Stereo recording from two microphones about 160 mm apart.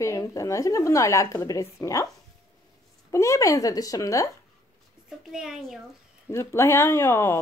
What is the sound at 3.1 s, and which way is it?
Speech, 20° left (ahead or behind).